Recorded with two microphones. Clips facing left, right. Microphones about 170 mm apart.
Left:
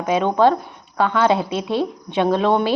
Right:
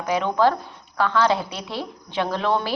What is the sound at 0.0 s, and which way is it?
A woman's voice, 20° left (ahead or behind).